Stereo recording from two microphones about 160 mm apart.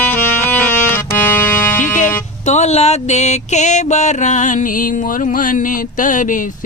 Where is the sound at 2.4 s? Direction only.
45° left (ahead or behind).